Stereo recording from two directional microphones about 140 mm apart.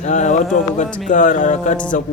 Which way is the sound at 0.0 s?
60° left (ahead or behind).